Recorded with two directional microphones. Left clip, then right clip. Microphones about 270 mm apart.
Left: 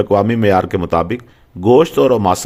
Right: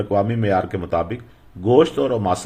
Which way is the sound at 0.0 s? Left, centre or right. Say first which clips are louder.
Left 7 dB; left.